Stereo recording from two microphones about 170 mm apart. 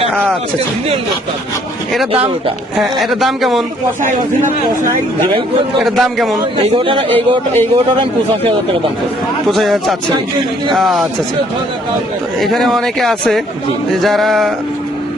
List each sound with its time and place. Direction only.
0.1 s speech: 10° right (ahead or behind)
2.7 s speech: centre (ahead or behind)
4.0 s speech: 50° right (ahead or behind)
5.8 s speech: centre (ahead or behind)
6.3 s a man's voice: 30° right (ahead or behind)
7.1 s a man's voice: 15° left (ahead or behind)
9.5 s speech: centre (ahead or behind)
12.4 s speech: centre (ahead or behind)